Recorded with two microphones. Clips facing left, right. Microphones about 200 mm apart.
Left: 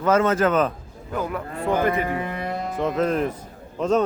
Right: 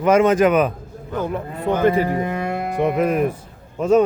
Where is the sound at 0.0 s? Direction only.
15° right (ahead or behind).